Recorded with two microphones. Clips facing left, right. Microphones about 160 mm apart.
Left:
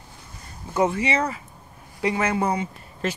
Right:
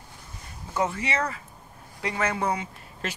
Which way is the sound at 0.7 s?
15° left (ahead or behind).